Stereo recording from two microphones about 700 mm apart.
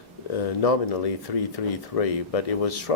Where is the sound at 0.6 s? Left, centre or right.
Left.